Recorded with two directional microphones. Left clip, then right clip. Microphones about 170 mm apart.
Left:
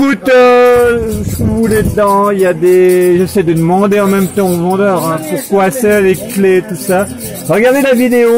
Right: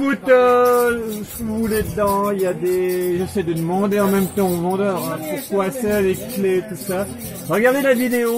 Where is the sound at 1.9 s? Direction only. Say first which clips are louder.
Left 9 dB; 60° left (ahead or behind); by 4.9 s 20° left (ahead or behind).